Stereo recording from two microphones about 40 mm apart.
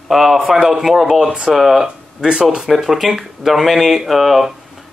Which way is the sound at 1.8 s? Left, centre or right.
Right.